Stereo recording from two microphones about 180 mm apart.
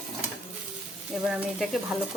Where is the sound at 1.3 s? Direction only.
Centre (ahead or behind).